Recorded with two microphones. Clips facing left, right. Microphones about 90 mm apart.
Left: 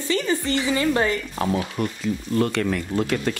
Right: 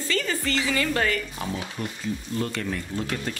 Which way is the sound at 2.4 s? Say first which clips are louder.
Left 8 dB; 75° left (ahead or behind).